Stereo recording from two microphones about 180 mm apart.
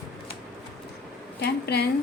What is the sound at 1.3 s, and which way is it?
Speech, 65° left (ahead or behind).